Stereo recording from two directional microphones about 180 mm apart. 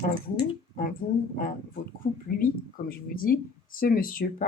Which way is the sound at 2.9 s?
55° left (ahead or behind).